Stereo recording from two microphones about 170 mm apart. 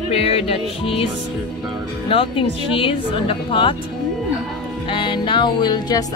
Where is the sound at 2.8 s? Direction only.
30° left (ahead or behind).